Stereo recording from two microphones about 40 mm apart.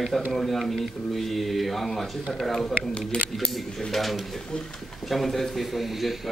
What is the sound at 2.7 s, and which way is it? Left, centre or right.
Speech, left.